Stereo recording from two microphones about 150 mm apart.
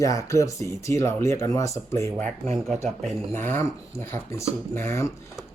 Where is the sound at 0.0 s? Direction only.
20° left (ahead or behind).